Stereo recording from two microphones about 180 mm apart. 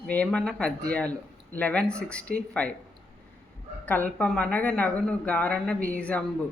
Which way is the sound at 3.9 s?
10° left (ahead or behind).